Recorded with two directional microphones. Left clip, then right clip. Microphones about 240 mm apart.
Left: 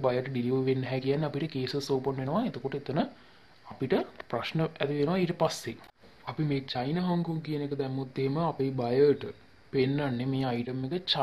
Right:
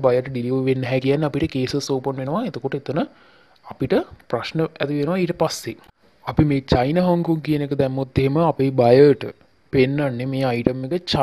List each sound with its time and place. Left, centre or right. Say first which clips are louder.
0.0 s speech: right 10 dB; right
6.2 s speech: right 12 dB; right